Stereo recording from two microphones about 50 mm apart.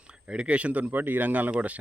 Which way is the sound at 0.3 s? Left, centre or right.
Right.